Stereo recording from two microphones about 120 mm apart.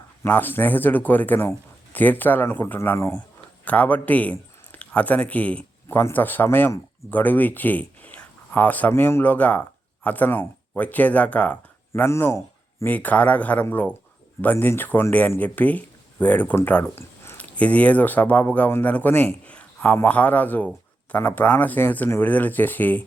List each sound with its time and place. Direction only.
0.2 s speech: 15° left (ahead or behind)